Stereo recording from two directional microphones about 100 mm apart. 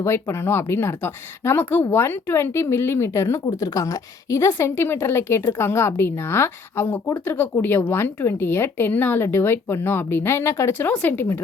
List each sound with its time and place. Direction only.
0.0 s speech: 25° left (ahead or behind)